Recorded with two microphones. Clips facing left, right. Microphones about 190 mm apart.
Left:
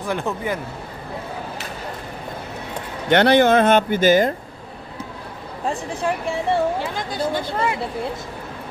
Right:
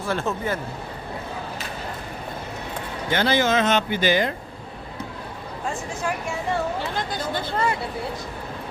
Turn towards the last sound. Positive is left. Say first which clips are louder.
# left 2 dB
turn(degrees=10)  # may be behind; listen again after turning